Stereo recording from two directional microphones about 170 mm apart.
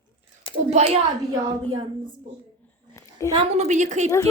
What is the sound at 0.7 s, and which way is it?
Speech, 40° right (ahead or behind).